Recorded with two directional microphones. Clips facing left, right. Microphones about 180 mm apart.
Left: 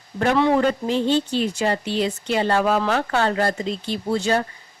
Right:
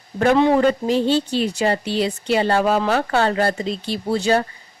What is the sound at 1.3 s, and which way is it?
Speech, 35° right (ahead or behind).